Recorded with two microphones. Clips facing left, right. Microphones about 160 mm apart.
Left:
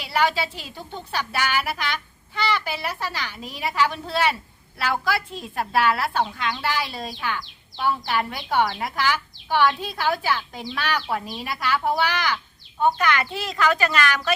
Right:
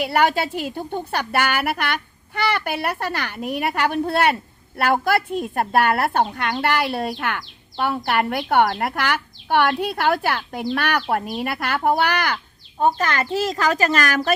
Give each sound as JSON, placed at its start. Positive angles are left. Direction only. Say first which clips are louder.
{"t": 0.0, "sound": "speech", "louder": "right 4 dB", "side_deg": -55}
{"t": 12.8, "sound": "speech", "louder": "right 1 dB", "side_deg": -40}